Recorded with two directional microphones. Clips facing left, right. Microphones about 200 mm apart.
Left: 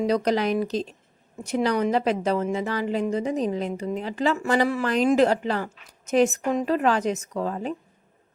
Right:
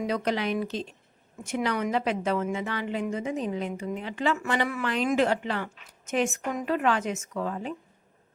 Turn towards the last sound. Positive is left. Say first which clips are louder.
# left 3 dB
turn(degrees=35)  # may be behind; listen again after turning